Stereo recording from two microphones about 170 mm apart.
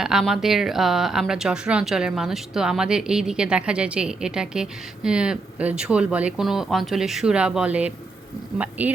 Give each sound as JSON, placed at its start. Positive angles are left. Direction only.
{"t": 0.0, "sound": "speech", "side_deg": 0}